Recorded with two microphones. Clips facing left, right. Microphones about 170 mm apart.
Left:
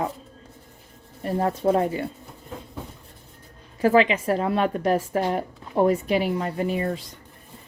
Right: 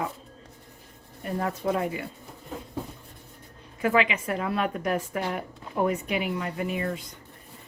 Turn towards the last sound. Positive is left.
turn(degrees=35)  # may be behind; listen again after turning